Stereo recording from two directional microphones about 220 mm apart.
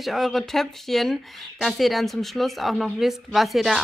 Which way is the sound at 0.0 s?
Centre (ahead or behind).